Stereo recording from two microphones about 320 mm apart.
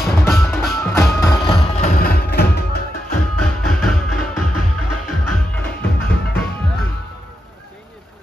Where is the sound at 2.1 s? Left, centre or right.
Left.